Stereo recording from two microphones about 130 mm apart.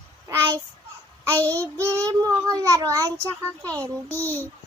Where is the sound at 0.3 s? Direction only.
30° right (ahead or behind).